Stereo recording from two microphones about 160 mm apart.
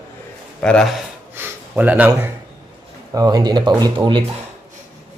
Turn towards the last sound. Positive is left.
turn(degrees=-30)  # may be behind; listen again after turning